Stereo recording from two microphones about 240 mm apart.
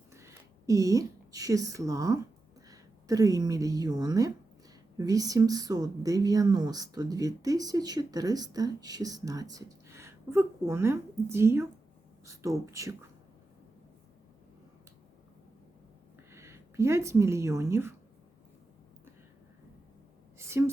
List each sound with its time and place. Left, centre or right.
0.1 s a woman's voice: centre
16.3 s speech: centre
20.4 s a sound: centre